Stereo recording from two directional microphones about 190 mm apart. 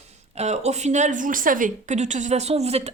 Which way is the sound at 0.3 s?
35° right (ahead or behind).